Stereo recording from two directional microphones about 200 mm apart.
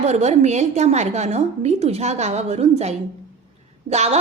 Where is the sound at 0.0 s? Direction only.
35° right (ahead or behind).